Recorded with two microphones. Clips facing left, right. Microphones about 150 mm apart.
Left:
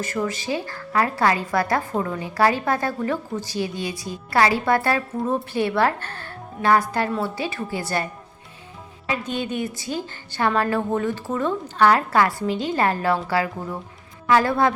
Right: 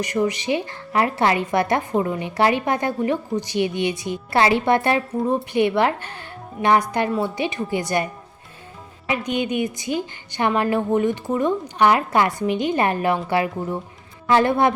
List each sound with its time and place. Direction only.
0.0 s a woman's voice: 20° right (ahead or behind)
9.0 s a woman's voice: 15° right (ahead or behind)